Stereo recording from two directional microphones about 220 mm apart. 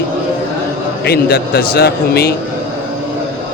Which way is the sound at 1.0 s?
45° left (ahead or behind).